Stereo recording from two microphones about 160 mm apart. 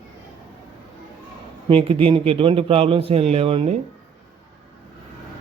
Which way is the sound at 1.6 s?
35° right (ahead or behind).